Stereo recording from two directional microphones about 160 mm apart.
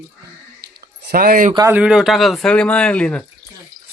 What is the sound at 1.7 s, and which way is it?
Speech, 5° right (ahead or behind).